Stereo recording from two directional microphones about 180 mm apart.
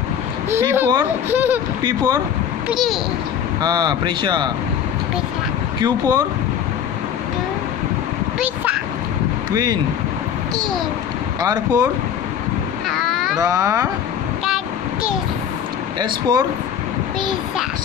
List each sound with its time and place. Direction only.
0.5 s speech: 15° right (ahead or behind)
1.8 s speech: 20° right (ahead or behind)
2.7 s a child's voice: centre (ahead or behind)
3.6 s speech: 25° right (ahead or behind)
5.8 s speech: 20° right (ahead or behind)
9.5 s speech: 20° right (ahead or behind)
11.4 s speech: 20° right (ahead or behind)
12.9 s a sound: centre (ahead or behind)
13.4 s speech: 20° right (ahead or behind)
16.0 s speech: 25° right (ahead or behind)